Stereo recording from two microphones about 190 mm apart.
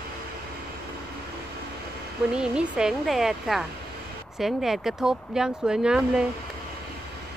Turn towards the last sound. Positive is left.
turn(degrees=-5)  # may be behind; listen again after turning